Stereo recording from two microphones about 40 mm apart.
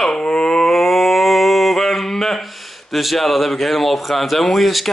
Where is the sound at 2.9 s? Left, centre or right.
Centre.